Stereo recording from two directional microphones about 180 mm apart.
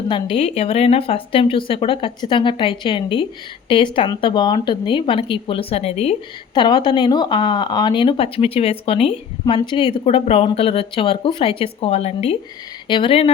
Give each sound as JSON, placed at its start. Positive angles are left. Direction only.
{"t": 0.1, "sound": "a woman's voice", "side_deg": 30}